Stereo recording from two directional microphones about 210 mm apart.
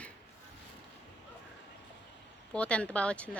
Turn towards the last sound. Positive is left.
turn(degrees=5)  # may be behind; listen again after turning